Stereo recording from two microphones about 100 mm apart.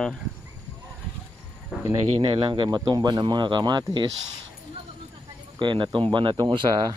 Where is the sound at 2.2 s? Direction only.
55° right (ahead or behind).